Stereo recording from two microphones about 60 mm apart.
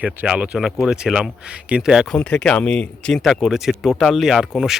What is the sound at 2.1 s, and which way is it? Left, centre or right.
Speech, centre.